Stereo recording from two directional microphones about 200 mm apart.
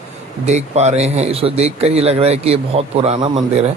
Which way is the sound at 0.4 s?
35° right (ahead or behind).